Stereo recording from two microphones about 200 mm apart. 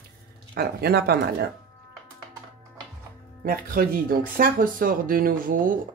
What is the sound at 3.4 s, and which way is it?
Speech, 45° right (ahead or behind).